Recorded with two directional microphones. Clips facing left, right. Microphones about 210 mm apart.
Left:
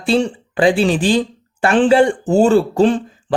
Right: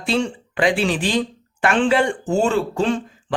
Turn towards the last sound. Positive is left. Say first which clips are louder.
# left 6 dB
turn(degrees=35)  # may be behind; listen again after turning